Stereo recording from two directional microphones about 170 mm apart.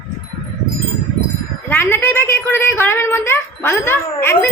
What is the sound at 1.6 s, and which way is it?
A woman's voice, 10° left (ahead or behind).